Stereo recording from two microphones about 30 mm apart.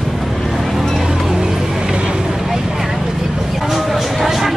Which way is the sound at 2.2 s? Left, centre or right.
Centre.